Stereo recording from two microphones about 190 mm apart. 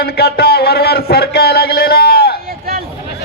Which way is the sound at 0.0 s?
55° left (ahead or behind).